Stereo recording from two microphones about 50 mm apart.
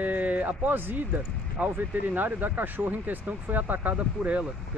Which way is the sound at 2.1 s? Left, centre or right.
Right.